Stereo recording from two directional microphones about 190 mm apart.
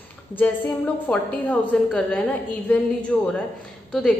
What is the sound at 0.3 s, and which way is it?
A woman's voice, 10° left (ahead or behind).